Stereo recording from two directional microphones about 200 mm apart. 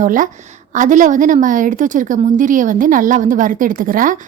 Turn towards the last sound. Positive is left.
turn(degrees=-40)  # may be behind; listen again after turning